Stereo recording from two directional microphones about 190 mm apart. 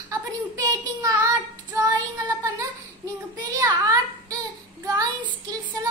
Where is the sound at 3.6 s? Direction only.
20° right (ahead or behind).